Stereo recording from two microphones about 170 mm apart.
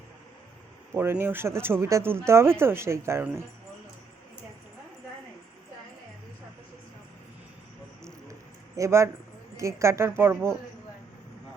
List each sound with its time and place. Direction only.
0.9 s speech: 15° right (ahead or behind)
8.0 s a sound: 20° right (ahead or behind)
9.6 s speech: 15° right (ahead or behind)